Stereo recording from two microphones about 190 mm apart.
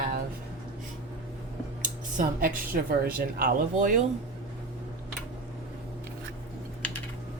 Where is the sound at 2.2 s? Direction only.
45° right (ahead or behind).